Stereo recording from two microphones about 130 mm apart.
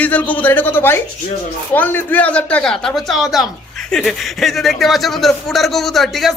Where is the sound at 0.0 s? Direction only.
10° left (ahead or behind).